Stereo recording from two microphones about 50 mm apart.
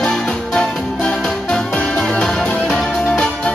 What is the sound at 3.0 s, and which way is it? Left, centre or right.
Music, centre.